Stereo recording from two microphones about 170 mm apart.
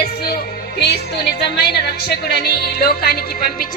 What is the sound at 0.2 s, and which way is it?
A woman's voice, 70° left (ahead or behind).